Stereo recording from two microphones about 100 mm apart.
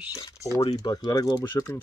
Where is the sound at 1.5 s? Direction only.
20° left (ahead or behind).